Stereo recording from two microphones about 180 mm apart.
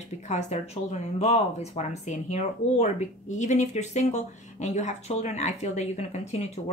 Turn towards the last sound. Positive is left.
turn(degrees=40)  # may be behind; listen again after turning